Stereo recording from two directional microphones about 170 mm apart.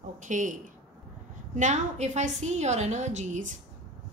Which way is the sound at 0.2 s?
50° right (ahead or behind).